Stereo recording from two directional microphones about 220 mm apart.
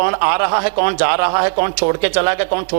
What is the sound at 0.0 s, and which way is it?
A man's voice, 20° right (ahead or behind).